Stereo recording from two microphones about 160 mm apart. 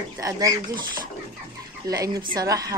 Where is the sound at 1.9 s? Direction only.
25° right (ahead or behind).